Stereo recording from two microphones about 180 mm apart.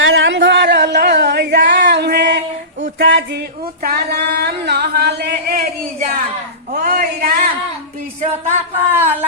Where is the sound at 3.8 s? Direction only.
60° right (ahead or behind).